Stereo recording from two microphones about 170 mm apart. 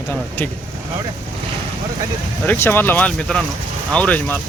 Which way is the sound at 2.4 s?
10° left (ahead or behind).